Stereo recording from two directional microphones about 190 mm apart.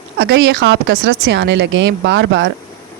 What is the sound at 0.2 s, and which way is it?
Speech, 65° right (ahead or behind).